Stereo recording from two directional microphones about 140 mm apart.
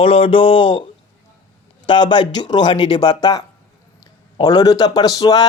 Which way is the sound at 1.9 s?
35° left (ahead or behind).